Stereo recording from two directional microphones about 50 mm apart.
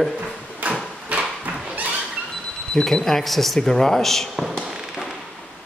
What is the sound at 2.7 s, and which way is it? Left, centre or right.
A man's voice, centre.